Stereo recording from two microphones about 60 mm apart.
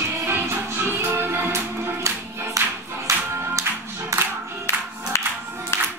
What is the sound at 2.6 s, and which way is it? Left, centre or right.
Clapping, right.